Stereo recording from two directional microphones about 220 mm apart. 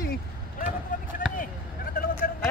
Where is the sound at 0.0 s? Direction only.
45° left (ahead or behind).